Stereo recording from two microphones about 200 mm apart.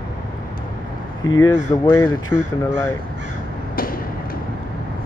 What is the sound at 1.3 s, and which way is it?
Speech, 15° left (ahead or behind).